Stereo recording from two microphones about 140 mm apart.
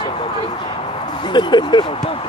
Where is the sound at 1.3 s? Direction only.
35° left (ahead or behind).